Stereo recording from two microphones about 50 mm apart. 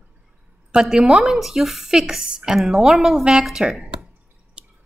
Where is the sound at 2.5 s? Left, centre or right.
Centre.